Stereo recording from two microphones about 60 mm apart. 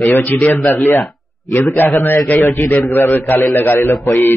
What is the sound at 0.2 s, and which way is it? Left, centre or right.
A man's voice, left.